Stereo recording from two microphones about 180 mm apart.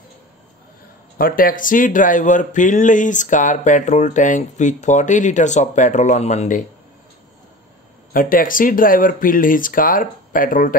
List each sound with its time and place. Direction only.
1.1 s speech: 50° left (ahead or behind)
8.1 s speech: 50° left (ahead or behind)